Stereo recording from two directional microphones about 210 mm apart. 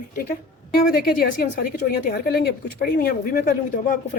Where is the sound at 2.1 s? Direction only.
45° left (ahead or behind).